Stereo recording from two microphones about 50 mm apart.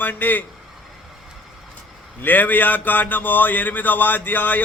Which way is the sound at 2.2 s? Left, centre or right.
Left.